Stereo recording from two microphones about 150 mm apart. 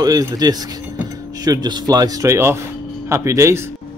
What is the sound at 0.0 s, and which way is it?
Speech, 25° right (ahead or behind).